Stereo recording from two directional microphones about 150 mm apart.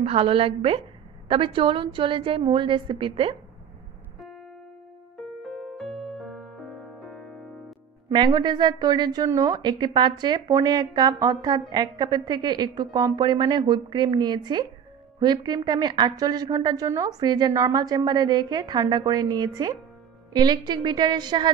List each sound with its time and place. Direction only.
0.0 s a woman's voice: 40° right (ahead or behind)
5.4 s music: centre (ahead or behind)
8.1 s a woman's voice: 30° right (ahead or behind)